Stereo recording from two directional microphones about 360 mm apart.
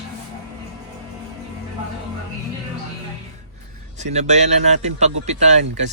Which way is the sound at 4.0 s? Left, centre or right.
Centre.